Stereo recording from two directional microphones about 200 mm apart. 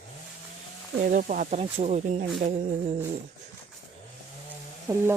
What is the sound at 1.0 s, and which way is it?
Speech, 40° right (ahead or behind).